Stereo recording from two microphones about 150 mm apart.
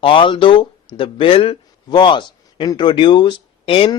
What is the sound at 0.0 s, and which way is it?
A man's voice, 35° left (ahead or behind).